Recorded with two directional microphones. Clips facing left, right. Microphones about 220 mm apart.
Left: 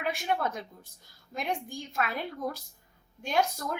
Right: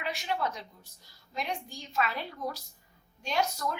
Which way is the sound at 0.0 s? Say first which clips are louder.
Left 3 dB; 50° left (ahead or behind).